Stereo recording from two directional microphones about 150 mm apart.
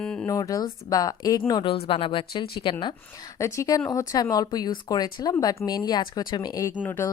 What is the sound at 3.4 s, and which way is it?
Speech, 20° left (ahead or behind).